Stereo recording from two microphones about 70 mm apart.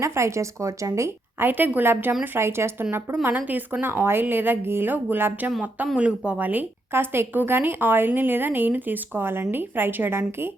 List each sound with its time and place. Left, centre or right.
0.0 s speech: right
1.4 s a woman's voice: right
3.2 s speech: right
6.0 s speech: centre; by 10.5 s right